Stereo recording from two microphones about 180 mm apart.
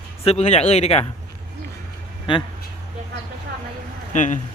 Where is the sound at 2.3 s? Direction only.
25° left (ahead or behind).